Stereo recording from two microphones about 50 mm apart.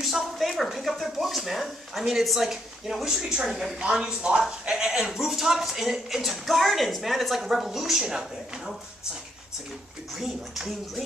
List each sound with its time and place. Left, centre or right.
0.0 s a woman's voice: centre
3.2 s speech: centre
3.8 s a woman's voice: centre
10.1 s a woman's voice: centre